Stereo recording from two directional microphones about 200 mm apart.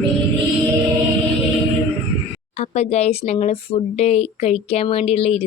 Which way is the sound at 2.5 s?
35° left (ahead or behind).